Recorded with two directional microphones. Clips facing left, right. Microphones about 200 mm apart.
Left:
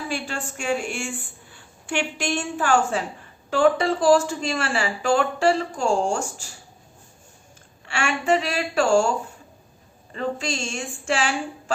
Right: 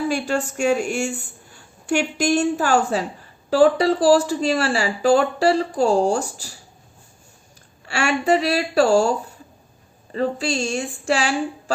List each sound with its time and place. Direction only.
0.1 s a woman's voice: 40° right (ahead or behind)
7.9 s a woman's voice: 40° right (ahead or behind)